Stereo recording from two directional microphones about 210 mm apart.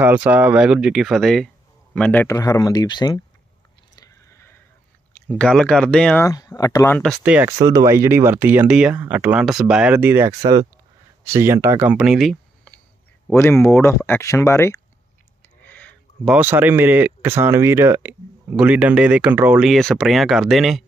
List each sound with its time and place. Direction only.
0.0 s speech: 5° right (ahead or behind); by 3.2 s 20° left (ahead or behind)
3.9 s a sound: 15° left (ahead or behind)
5.4 s speech: 5° left (ahead or behind)
6.2 s speech: 15° left (ahead or behind)
7.0 s speech: 5° right (ahead or behind)
7.6 s speech: 15° right (ahead or behind); by 14.8 s 15° left (ahead or behind)
15.6 s a sound: 5° left (ahead or behind)
16.3 s speech: 10° right (ahead or behind)